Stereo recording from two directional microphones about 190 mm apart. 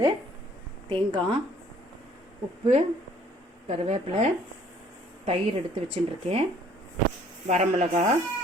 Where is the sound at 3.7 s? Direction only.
35° right (ahead or behind).